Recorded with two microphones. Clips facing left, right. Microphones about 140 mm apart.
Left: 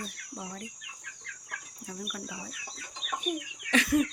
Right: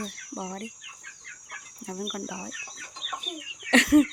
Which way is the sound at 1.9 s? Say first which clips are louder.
Right 6 dB; 45° right (ahead or behind).